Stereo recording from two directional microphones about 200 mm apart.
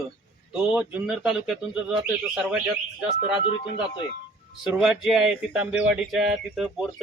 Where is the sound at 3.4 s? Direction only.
25° left (ahead or behind).